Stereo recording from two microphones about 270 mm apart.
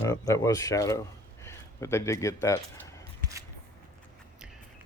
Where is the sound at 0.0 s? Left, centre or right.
Centre.